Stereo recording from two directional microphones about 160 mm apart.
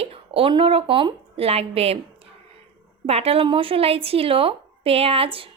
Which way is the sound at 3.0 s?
40° right (ahead or behind).